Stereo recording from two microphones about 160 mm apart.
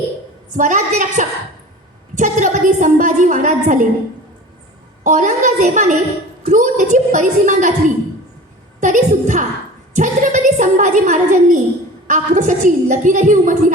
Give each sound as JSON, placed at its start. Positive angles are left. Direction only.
{"t": 0.5, "sound": "a woman's voice", "side_deg": -50}
{"t": 5.0, "sound": "a woman's voice", "side_deg": -50}
{"t": 8.8, "sound": "a woman's voice", "side_deg": -50}